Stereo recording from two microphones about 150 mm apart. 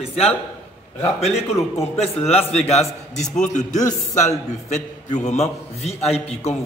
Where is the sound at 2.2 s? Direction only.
45° left (ahead or behind).